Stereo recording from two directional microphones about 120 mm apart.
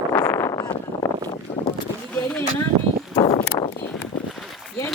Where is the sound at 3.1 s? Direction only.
45° left (ahead or behind).